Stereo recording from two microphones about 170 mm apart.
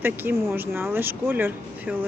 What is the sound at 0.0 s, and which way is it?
Speech, 10° right (ahead or behind).